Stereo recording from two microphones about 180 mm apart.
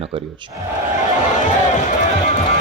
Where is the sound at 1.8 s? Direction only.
45° left (ahead or behind).